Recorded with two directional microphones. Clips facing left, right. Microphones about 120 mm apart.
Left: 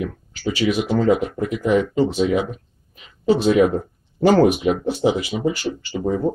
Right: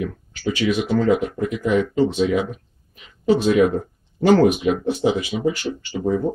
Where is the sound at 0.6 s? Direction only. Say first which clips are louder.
Left 1 dB; 5° left (ahead or behind).